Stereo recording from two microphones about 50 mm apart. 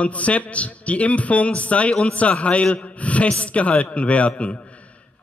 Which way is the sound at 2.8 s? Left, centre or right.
Left.